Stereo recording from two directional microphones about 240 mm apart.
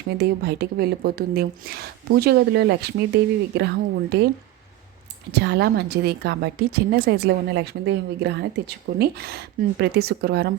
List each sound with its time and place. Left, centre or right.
0.2 s a woman's voice: right
5.3 s a woman's voice: right